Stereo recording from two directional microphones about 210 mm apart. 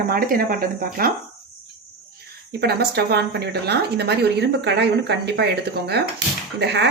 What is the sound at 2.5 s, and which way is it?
Speech, 50° right (ahead or behind).